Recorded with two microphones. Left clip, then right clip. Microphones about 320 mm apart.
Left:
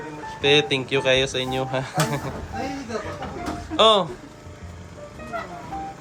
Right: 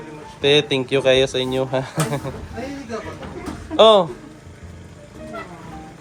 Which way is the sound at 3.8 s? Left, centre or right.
Centre.